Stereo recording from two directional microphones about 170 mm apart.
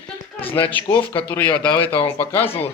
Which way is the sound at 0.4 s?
30° left (ahead or behind).